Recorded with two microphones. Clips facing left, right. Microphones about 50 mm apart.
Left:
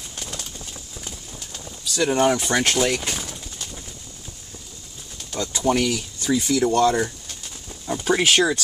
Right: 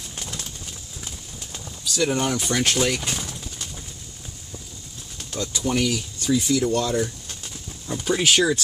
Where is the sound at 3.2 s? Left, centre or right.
Centre.